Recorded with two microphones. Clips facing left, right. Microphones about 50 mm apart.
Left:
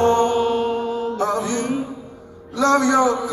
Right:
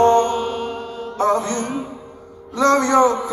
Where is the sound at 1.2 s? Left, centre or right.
Right.